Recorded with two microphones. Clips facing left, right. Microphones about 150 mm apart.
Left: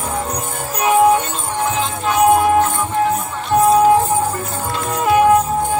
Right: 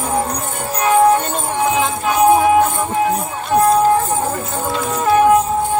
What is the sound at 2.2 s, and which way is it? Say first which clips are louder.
Music: right 1 dB; centre (ahead or behind).